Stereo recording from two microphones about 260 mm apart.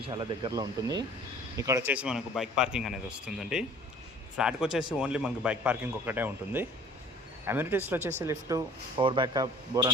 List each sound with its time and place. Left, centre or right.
0.0 s a man's voice: centre